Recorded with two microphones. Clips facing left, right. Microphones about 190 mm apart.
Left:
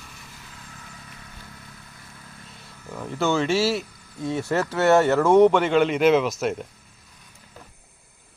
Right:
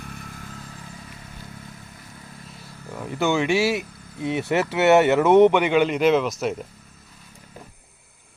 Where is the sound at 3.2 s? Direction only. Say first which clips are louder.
Right 1 dB; 15° right (ahead or behind).